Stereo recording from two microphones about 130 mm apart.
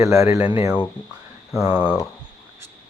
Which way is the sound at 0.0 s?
25° right (ahead or behind).